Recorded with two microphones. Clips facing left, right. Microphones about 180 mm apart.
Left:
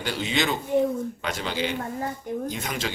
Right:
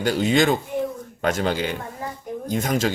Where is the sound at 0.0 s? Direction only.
45° right (ahead or behind).